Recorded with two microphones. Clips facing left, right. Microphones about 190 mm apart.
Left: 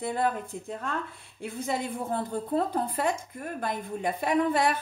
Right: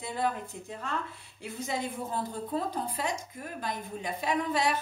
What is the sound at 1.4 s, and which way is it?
A woman's voice, 55° left (ahead or behind).